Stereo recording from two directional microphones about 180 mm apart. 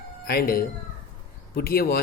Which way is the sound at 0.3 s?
55° left (ahead or behind).